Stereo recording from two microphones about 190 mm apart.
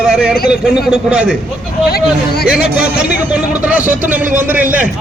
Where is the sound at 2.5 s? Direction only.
5° right (ahead or behind).